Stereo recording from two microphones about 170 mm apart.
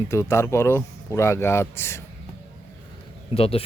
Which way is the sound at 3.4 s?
35° left (ahead or behind).